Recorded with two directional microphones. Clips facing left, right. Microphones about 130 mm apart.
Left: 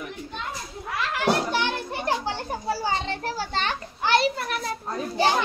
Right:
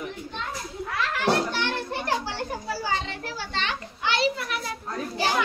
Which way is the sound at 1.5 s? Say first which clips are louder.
Left 2 dB; 15° left (ahead or behind).